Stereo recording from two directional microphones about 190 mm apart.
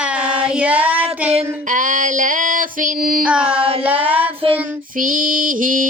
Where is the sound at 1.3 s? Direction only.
40° right (ahead or behind).